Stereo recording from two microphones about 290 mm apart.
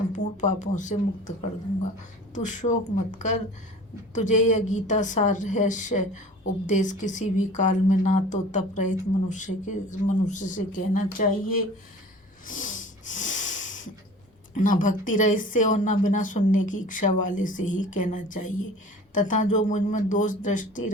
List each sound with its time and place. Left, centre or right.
0.1 s a woman's voice: left
2.3 s a woman's voice: left
12.5 s snort: left
14.5 s a woman's voice: left